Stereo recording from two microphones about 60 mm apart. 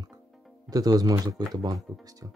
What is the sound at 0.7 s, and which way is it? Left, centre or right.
Speech, right.